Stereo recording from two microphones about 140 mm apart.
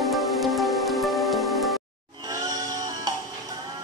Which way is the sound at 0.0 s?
Centre (ahead or behind).